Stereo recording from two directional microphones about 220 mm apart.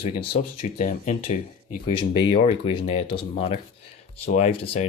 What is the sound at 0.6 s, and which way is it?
Speech, 35° left (ahead or behind).